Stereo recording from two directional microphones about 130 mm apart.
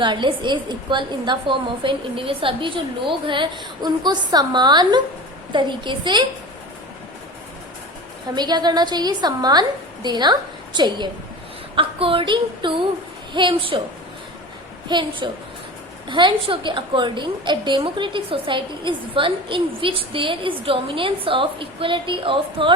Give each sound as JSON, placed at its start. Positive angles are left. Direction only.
{"t": 0.0, "sound": "a woman's voice", "side_deg": -35}
{"t": 8.4, "sound": "a woman's voice", "side_deg": -30}
{"t": 14.8, "sound": "a woman's voice", "side_deg": -35}